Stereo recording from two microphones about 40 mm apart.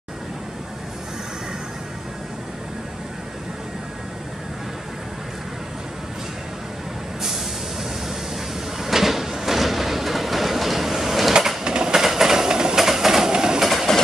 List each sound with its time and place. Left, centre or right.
8.8 s a sound: centre
11.3 s train: centre
13.6 s train: centre